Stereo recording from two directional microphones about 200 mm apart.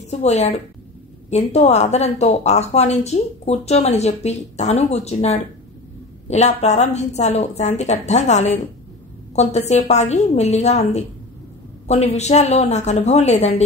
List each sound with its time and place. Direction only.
0.0 s a woman's voice: 35° left (ahead or behind)
11.9 s a woman's voice: 35° left (ahead or behind)